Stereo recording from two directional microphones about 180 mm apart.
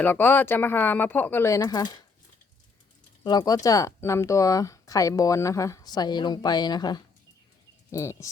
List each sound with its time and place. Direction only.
0.0 s speech: 10° left (ahead or behind)
3.2 s speech: 20° left (ahead or behind)